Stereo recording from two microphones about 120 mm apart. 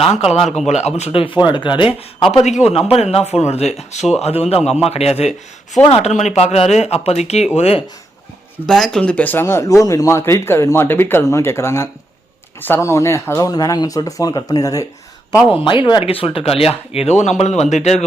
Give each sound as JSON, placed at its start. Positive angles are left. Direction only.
{"t": 0.0, "sound": "speech", "side_deg": 55}
{"t": 0.7, "sound": "speech", "side_deg": 70}
{"t": 2.6, "sound": "speech", "side_deg": 55}
{"t": 8.6, "sound": "speech", "side_deg": 5}
{"t": 15.6, "sound": "speech", "side_deg": 45}